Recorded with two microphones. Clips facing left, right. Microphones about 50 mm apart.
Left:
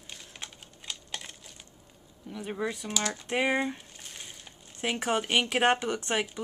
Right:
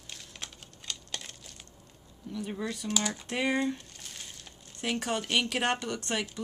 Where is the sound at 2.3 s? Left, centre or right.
Centre.